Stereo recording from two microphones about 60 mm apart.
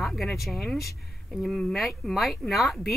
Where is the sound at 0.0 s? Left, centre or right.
Centre.